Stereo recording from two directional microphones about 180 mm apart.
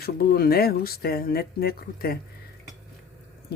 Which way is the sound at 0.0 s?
60° left (ahead or behind).